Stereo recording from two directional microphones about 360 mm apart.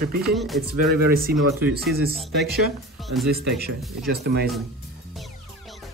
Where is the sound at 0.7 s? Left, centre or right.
Right.